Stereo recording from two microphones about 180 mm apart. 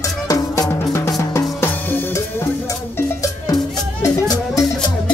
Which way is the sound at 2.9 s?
15° left (ahead or behind).